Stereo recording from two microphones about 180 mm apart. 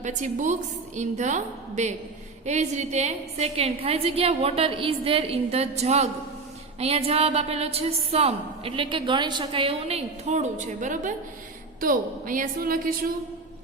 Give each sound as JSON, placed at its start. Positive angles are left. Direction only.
{"t": 0.0, "sound": "a woman's voice", "side_deg": -40}